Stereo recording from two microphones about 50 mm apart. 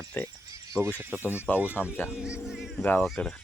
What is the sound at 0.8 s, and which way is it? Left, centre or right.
Speech, centre.